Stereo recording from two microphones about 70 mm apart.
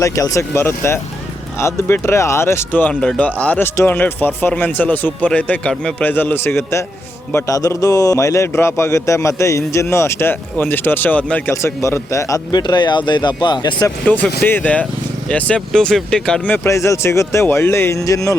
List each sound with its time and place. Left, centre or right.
0.0 s a man's voice: left
3.0 s speech: centre; by 6.8 s left
7.4 s a man's voice: left
11.5 s a man's voice: left
12.5 s speech: left
14.0 s speech: left
16.6 s speech: left
18.0 s a man's voice: left